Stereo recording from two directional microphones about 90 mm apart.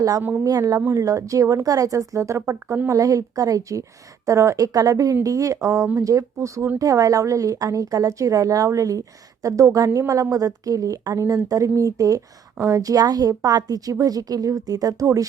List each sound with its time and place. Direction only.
0.2 s a woman's voice: 20° right (ahead or behind)
0.4 s a woman's voice: 40° right (ahead or behind)